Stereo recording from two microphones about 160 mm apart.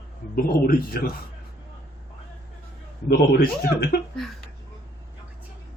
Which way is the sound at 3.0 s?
75° left (ahead or behind).